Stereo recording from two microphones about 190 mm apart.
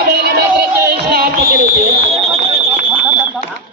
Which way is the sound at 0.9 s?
55° right (ahead or behind).